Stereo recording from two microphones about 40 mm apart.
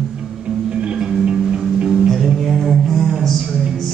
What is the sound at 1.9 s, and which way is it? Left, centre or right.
Music, centre.